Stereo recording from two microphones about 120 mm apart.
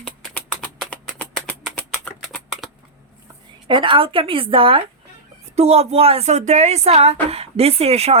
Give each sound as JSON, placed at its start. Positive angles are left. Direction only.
{"t": 0.0, "sound": "a sound", "side_deg": 10}
{"t": 2.2, "sound": "typing", "side_deg": 0}
{"t": 3.7, "sound": "speech", "side_deg": -45}
{"t": 5.5, "sound": "a woman's voice", "side_deg": -60}